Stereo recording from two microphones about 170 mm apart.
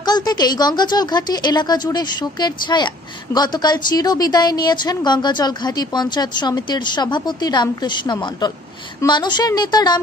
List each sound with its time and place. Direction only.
0.0 s speech: 25° left (ahead or behind)